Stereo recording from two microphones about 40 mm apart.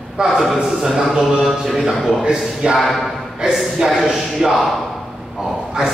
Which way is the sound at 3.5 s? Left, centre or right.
Centre.